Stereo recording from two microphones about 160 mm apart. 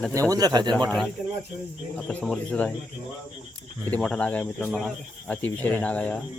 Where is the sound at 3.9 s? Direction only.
5° left (ahead or behind).